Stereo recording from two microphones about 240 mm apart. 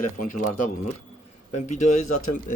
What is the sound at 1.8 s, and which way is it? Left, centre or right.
Speech, left.